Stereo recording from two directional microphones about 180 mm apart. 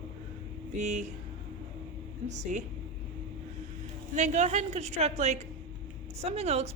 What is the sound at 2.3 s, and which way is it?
Speech, 40° right (ahead or behind).